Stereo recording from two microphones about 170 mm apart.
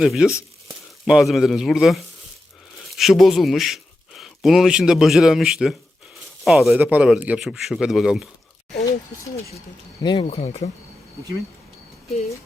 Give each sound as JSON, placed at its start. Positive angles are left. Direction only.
{"t": 0.0, "sound": "speech", "side_deg": 0}
{"t": 3.0, "sound": "a man's voice", "side_deg": 0}
{"t": 10.0, "sound": "speech", "side_deg": 25}
{"t": 10.2, "sound": "speech", "side_deg": 40}